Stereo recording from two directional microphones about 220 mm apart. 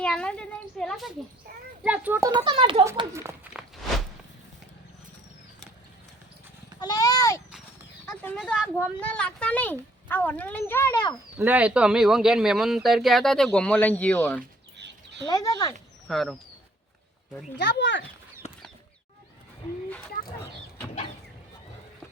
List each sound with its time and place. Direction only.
0.0 s a woman's voice: 5° left (ahead or behind)
6.7 s a sound: 15° left (ahead or behind)
8.4 s a woman's voice: 5° right (ahead or behind); by 11.2 s 20° left (ahead or behind)
11.3 s speech: 5° right (ahead or behind)
14.8 s a sound: 50° right (ahead or behind)
15.3 s speech: 15° left (ahead or behind)
16.0 s speech: centre (ahead or behind)
17.6 s speech: 50° left (ahead or behind)